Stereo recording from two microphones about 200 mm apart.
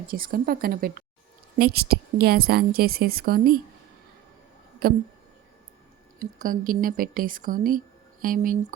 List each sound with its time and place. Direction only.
0.1 s a woman's voice: 45° right (ahead or behind)
4.8 s a woman's voice: 50° right (ahead or behind)
6.1 s a woman's voice: 40° right (ahead or behind)